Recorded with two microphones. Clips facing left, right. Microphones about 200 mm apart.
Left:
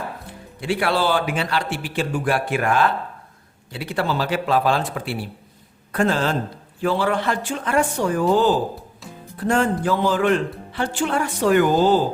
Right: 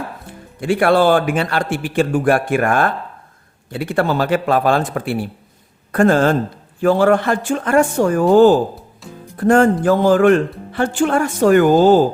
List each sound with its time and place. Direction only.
0.6 s a man's voice: 50° right (ahead or behind)